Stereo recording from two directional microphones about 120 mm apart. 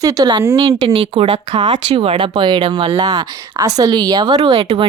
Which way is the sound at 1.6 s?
45° right (ahead or behind).